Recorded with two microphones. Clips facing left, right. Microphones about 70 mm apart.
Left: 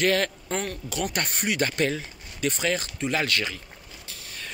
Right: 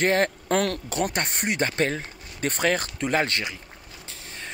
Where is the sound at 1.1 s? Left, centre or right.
Right.